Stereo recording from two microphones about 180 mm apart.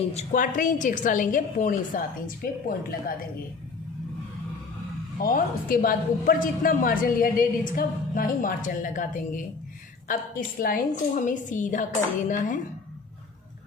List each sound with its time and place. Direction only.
0.1 s a woman's voice: 40° left (ahead or behind)
5.2 s a woman's voice: 50° left (ahead or behind)